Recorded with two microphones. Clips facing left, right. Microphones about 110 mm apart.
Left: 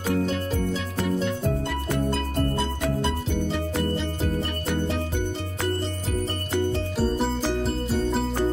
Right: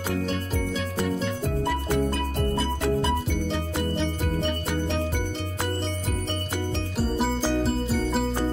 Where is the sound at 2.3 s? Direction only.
Centre (ahead or behind).